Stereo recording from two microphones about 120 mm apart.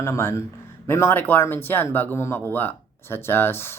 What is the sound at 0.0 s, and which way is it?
Speech, 20° left (ahead or behind).